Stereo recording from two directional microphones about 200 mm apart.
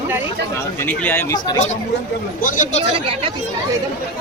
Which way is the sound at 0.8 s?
10° left (ahead or behind).